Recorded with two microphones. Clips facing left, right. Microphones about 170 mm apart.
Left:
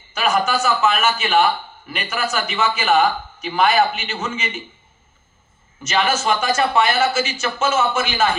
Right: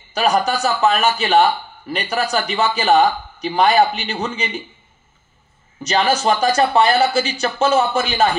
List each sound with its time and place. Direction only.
0.1 s a man's voice: 35° right (ahead or behind)
5.8 s a man's voice: 35° right (ahead or behind)